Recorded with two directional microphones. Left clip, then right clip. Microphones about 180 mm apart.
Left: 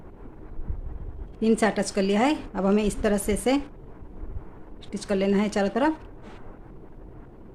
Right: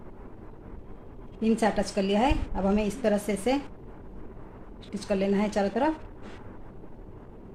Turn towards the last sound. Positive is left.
turn(degrees=40)  # may be behind; listen again after turning